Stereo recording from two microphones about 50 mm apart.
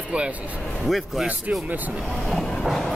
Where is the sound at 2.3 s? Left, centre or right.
Centre.